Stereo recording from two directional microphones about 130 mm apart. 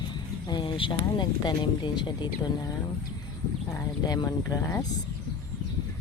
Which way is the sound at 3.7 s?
30° left (ahead or behind).